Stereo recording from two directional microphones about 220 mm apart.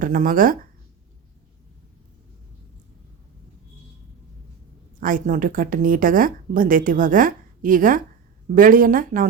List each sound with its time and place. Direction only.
0.0 s speech: 35° right (ahead or behind)
4.9 s speech: 40° right (ahead or behind)